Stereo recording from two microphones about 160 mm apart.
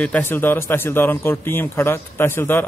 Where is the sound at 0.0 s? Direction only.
10° left (ahead or behind).